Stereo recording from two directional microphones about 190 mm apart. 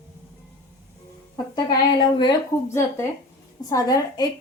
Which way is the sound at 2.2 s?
20° left (ahead or behind).